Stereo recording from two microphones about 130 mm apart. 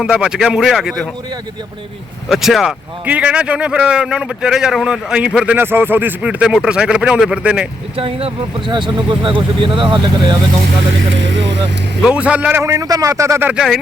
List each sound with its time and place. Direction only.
0.0 s a man's voice: 5° right (ahead or behind)
2.3 s a man's voice: centre (ahead or behind)
7.9 s speech: 45° right (ahead or behind)
12.0 s a man's voice: 10° right (ahead or behind)
13.5 s a man's voice: 5° right (ahead or behind)